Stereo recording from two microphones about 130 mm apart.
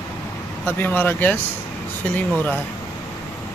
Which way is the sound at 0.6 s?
15° left (ahead or behind).